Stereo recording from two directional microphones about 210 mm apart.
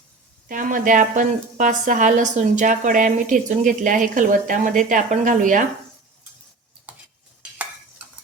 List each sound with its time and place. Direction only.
0.4 s speech: 40° right (ahead or behind)